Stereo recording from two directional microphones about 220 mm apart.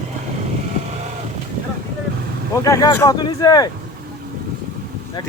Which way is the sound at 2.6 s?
15° left (ahead or behind).